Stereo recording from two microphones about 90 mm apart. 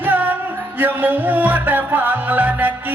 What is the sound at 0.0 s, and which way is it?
Music, 20° right (ahead or behind).